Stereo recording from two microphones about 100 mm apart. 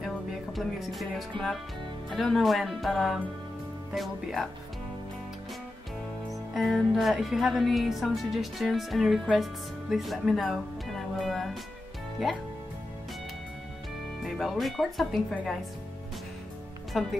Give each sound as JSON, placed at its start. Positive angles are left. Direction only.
{"t": 0.0, "sound": "music", "side_deg": 0}
{"t": 2.0, "sound": "speech", "side_deg": 0}
{"t": 6.5, "sound": "speech", "side_deg": 0}
{"t": 14.2, "sound": "speech", "side_deg": 0}
{"t": 17.0, "sound": "speech", "side_deg": 0}